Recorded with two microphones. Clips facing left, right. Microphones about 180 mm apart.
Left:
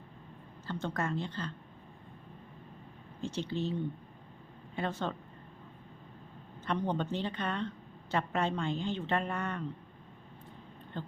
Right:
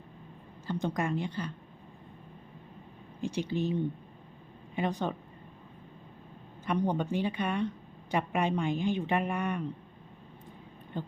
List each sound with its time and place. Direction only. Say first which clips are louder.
0.7 s a woman's voice: right 4 dB; 15° right (ahead or behind)
3.2 s speech: right 3 dB; 15° right (ahead or behind)
6.7 s a woman's voice: right 3 dB; 10° right (ahead or behind)
10.9 s a woman's voice: right 4 dB; 15° right (ahead or behind)